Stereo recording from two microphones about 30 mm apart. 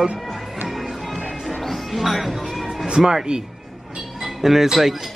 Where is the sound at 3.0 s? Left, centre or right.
Centre.